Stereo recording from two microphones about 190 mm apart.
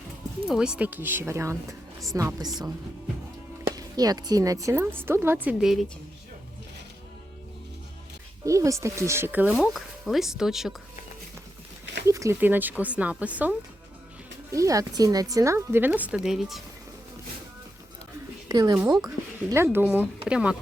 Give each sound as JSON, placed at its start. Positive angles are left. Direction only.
{"t": 0.4, "sound": "a woman's voice", "side_deg": -5}
{"t": 3.8, "sound": "speech", "side_deg": -20}
{"t": 8.4, "sound": "speech", "side_deg": -15}
{"t": 12.0, "sound": "speech", "side_deg": -15}
{"t": 18.4, "sound": "speech", "side_deg": -20}